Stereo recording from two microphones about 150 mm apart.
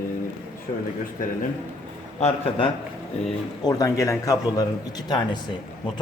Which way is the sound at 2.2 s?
35° left (ahead or behind).